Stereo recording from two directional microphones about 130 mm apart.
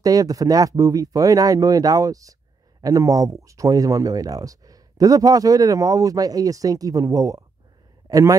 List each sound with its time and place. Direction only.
0.0 s a man's voice: 25° right (ahead or behind)